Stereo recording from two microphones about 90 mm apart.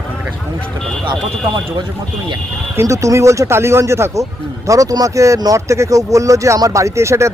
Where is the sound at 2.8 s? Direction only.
35° right (ahead or behind).